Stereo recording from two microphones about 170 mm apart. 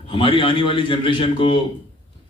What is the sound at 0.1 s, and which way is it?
A man's voice, 30° left (ahead or behind).